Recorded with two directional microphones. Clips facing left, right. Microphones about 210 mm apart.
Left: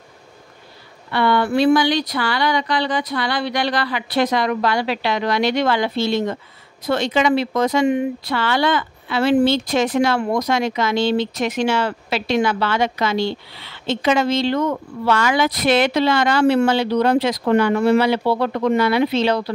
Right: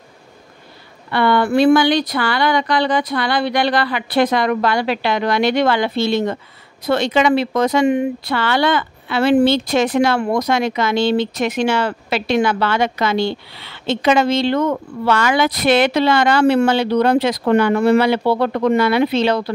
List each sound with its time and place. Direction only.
1.1 s speech: 55° right (ahead or behind)